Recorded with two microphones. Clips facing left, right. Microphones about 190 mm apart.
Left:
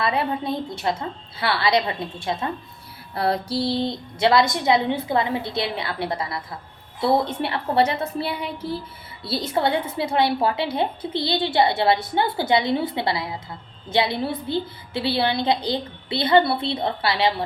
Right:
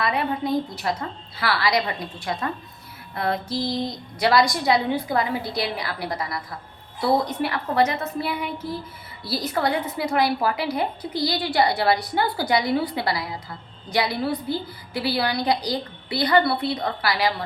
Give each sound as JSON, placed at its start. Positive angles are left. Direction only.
{"t": 0.0, "sound": "a woman's voice", "side_deg": 30}